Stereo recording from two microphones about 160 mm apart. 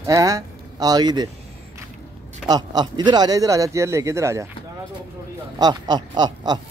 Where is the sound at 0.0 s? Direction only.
20° right (ahead or behind).